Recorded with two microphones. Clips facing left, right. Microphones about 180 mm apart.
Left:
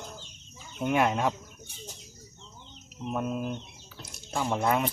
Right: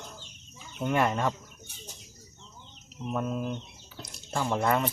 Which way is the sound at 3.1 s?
10° left (ahead or behind).